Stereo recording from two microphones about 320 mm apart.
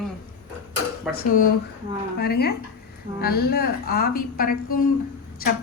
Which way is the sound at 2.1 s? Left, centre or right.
Left.